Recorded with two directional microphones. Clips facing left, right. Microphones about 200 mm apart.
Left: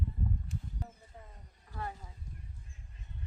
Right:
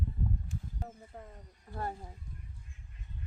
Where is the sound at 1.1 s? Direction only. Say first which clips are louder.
Right 6 dB; 55° right (ahead or behind).